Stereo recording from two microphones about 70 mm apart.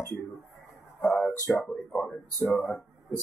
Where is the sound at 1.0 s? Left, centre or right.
Left.